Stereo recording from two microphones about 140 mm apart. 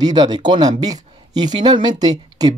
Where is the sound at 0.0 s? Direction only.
30° right (ahead or behind).